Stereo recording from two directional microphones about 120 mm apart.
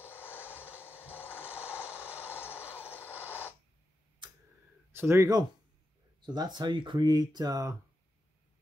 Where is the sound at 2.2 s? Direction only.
20° left (ahead or behind).